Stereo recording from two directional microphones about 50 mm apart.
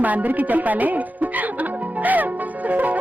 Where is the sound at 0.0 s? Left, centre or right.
Right.